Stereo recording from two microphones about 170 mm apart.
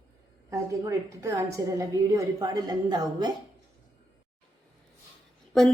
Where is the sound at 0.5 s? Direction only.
15° right (ahead or behind).